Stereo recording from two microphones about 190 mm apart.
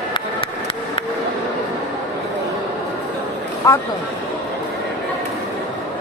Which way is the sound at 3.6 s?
15° left (ahead or behind).